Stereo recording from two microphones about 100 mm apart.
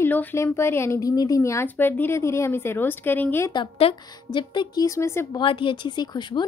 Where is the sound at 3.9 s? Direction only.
75° left (ahead or behind).